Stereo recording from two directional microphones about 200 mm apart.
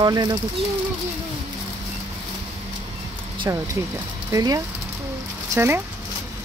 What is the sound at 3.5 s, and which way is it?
Speech, 15° right (ahead or behind).